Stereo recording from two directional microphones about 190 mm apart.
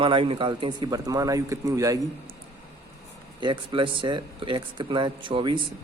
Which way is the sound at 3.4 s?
25° right (ahead or behind).